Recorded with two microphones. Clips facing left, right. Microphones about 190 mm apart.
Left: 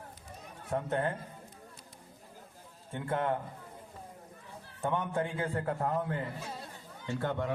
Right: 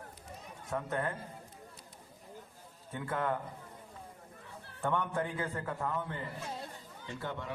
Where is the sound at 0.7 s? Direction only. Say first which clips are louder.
Left 3 dB; 30° left (ahead or behind).